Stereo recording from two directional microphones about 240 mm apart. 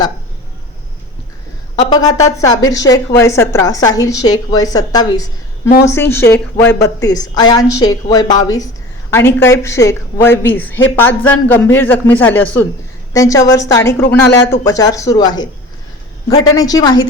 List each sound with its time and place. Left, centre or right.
1.7 s a woman's voice: centre
16.6 s a woman's voice: centre